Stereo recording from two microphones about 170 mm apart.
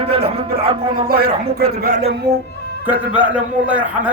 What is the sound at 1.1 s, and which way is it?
Speech, 65° right (ahead or behind).